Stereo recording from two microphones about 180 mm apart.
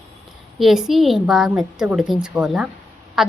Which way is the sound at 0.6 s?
Centre (ahead or behind).